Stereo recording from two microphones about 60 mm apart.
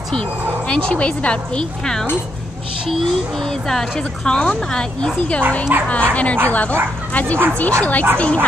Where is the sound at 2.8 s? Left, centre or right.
Centre; by 5.4 s left.